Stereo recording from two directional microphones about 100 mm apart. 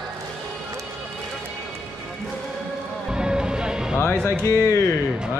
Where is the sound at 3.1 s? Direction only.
10° right (ahead or behind).